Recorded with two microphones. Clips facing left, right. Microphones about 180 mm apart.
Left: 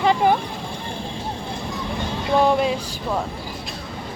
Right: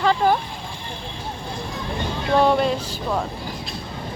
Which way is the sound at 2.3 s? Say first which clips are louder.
Even; 10° left (ahead or behind).